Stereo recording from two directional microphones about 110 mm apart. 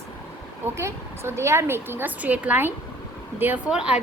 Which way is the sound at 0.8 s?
25° right (ahead or behind).